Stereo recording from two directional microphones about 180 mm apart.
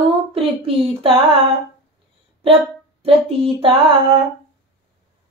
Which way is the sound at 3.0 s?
30° right (ahead or behind).